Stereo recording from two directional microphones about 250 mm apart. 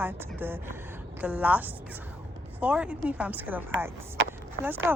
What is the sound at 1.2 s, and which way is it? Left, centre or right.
Speech, centre.